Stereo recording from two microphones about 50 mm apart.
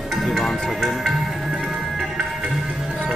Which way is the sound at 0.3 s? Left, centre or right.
Centre.